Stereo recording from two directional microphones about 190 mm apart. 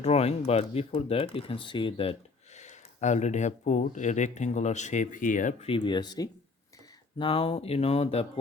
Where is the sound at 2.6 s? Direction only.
40° left (ahead or behind).